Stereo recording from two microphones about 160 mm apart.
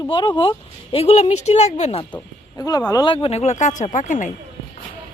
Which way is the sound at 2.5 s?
20° left (ahead or behind).